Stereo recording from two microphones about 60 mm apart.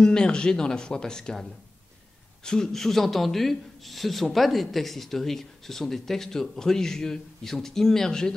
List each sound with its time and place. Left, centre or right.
0.0 s a man's voice: centre